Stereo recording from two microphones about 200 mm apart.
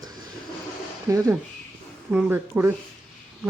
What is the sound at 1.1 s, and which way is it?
A man's voice, 15° right (ahead or behind).